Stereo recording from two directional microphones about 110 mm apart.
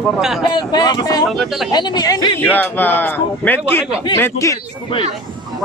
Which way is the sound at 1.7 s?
40° left (ahead or behind).